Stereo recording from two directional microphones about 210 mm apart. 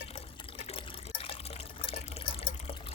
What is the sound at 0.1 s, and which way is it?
Water, 25° left (ahead or behind).